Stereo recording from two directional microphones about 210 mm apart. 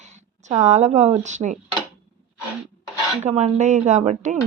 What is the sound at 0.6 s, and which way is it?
Speech, 35° right (ahead or behind).